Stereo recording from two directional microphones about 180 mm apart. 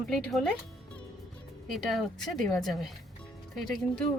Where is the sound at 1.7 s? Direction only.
Centre (ahead or behind).